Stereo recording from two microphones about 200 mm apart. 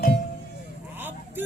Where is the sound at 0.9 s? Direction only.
10° right (ahead or behind).